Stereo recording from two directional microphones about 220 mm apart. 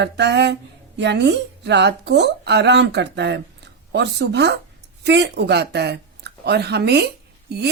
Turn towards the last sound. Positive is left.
turn(degrees=-50)  # may be behind; listen again after turning